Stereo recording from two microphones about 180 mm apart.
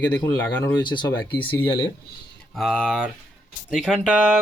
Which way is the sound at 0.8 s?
25° left (ahead or behind).